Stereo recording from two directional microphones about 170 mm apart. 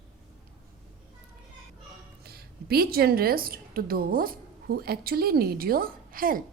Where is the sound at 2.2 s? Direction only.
65° right (ahead or behind).